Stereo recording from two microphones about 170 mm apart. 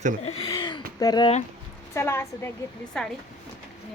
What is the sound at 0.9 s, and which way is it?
A woman's voice, 25° left (ahead or behind).